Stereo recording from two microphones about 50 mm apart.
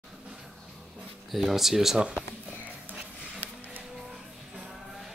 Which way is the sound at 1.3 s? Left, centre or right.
Centre.